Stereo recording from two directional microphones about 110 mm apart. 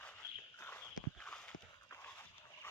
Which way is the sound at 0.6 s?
15° left (ahead or behind).